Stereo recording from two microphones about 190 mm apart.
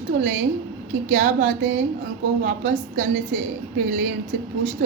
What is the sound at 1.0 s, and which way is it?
A woman's voice, 40° right (ahead or behind).